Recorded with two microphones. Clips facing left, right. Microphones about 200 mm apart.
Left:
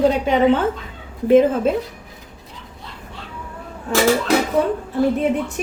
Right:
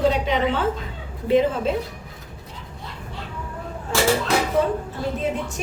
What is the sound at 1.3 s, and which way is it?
Speech, 50° left (ahead or behind).